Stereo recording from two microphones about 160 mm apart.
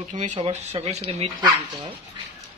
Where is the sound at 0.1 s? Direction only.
50° right (ahead or behind); by 1.9 s 30° right (ahead or behind).